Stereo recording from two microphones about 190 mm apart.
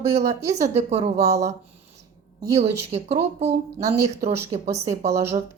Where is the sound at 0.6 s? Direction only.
35° right (ahead or behind).